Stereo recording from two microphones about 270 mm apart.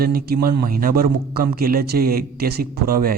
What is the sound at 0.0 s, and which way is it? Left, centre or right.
Speech, right.